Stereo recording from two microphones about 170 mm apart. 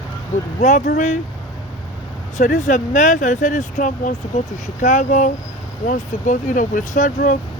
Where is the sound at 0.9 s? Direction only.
60° left (ahead or behind).